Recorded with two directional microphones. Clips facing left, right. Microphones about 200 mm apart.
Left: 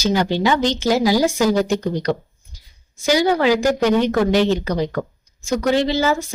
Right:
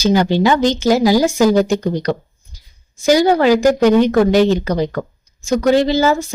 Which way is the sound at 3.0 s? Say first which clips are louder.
Right 4 dB; 45° right (ahead or behind).